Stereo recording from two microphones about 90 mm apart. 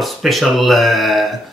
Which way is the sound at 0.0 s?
Centre (ahead or behind).